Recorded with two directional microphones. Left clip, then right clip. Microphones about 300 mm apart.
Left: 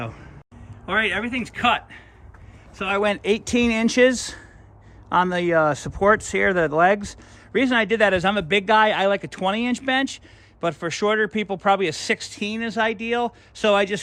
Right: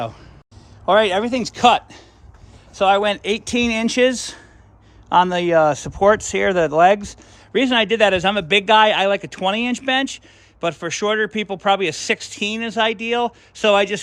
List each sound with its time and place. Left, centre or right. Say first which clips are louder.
0.9 s a man's voice: right 7 dB; centre